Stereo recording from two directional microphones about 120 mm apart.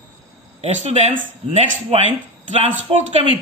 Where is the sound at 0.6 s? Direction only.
65° right (ahead or behind).